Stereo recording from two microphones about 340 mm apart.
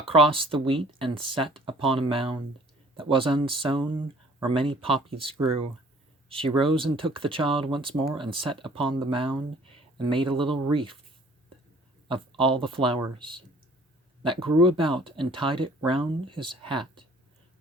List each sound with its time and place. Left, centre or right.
0.1 s speech: centre
12.0 s speech: centre